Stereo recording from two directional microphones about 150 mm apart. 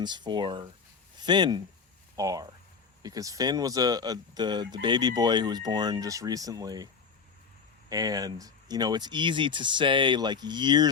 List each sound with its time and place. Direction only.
0.0 s speech: 30° right (ahead or behind)
7.9 s speech: 25° right (ahead or behind)